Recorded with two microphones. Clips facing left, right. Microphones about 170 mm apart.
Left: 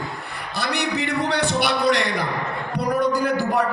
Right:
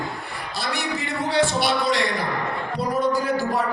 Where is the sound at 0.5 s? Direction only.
65° left (ahead or behind).